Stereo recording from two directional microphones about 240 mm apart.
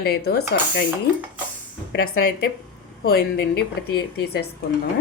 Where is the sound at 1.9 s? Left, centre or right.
Left.